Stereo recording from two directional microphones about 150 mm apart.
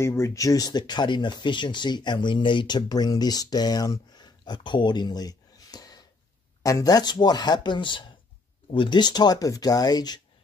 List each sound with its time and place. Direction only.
0.0 s speech: 20° left (ahead or behind)